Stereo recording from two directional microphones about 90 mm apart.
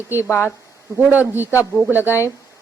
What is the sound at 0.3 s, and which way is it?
Speech, 25° left (ahead or behind).